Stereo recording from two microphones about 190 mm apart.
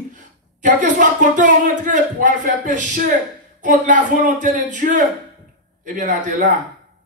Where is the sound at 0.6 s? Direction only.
40° right (ahead or behind).